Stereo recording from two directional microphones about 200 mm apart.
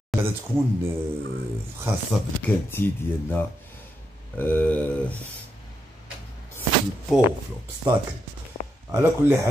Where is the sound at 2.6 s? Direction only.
10° left (ahead or behind).